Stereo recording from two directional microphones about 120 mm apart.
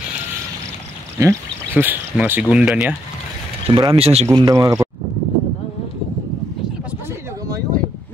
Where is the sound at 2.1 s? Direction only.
15° right (ahead or behind).